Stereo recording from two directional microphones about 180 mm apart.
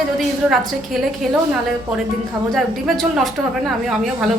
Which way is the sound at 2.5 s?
Centre (ahead or behind).